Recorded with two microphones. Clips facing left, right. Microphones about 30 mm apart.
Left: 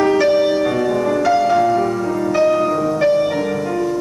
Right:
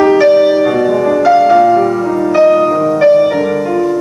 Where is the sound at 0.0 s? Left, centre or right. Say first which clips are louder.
Right 6 dB; centre.